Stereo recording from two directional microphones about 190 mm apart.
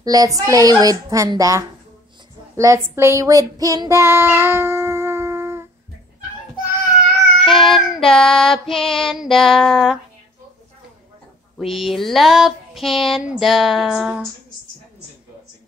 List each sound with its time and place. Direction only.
0.0 s a woman's voice: 20° right (ahead or behind)
2.5 s child singing: 15° right (ahead or behind)
7.3 s child singing: centre (ahead or behind)
11.5 s a sound: centre (ahead or behind)